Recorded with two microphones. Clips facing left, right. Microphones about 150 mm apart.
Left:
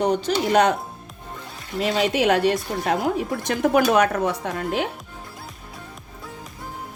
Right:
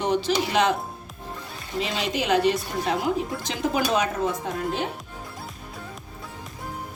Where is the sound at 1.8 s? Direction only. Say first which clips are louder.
Left 6 dB; 55° left (ahead or behind); by 4.8 s 75° left (ahead or behind).